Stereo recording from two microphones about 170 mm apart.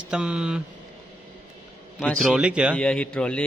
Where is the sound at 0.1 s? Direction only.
5° right (ahead or behind).